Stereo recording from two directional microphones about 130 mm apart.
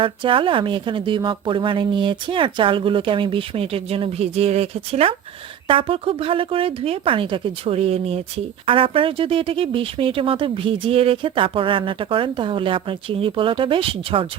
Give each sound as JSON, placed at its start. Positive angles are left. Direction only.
{"t": 0.0, "sound": "speech", "side_deg": -40}